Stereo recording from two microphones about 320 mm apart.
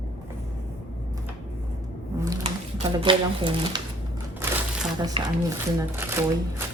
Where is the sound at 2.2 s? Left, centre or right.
Centre.